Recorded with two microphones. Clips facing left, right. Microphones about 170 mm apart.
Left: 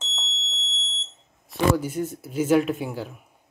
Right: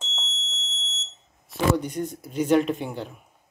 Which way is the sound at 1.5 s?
5° left (ahead or behind).